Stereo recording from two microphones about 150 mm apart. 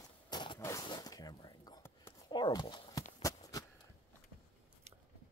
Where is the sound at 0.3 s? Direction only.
30° left (ahead or behind).